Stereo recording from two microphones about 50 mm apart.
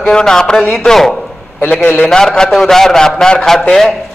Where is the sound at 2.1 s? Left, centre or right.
Centre.